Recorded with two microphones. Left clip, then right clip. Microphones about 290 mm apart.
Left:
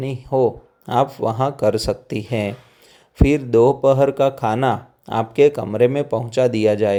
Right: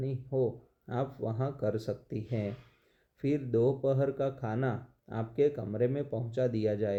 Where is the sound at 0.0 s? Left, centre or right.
Left.